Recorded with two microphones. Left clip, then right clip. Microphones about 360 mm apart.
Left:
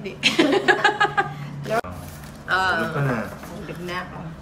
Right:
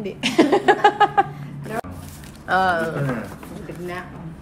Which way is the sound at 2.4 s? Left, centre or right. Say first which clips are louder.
Right 2 dB; centre.